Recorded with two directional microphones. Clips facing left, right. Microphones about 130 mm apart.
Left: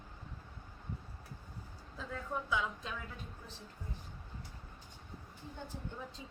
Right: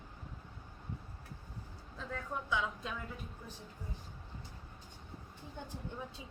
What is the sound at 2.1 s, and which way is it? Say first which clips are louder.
Speech: even; centre (ahead or behind).